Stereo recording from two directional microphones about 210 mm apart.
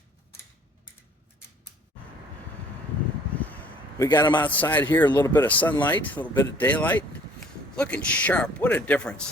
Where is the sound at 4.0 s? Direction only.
15° left (ahead or behind).